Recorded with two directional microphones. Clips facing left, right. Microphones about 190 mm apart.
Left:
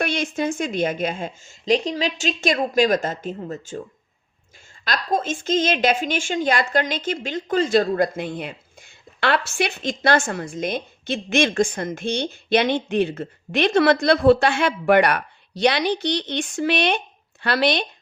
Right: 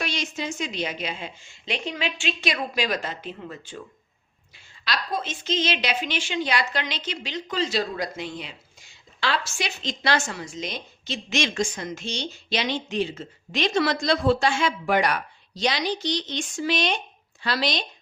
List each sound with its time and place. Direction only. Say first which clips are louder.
0.0 s a woman's voice: left 7 dB; 55° left (ahead or behind)